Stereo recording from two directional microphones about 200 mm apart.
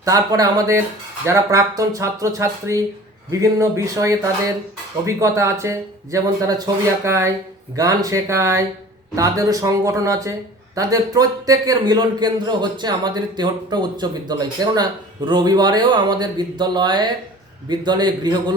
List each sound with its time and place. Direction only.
0.0 s a man's voice: 20° right (ahead or behind)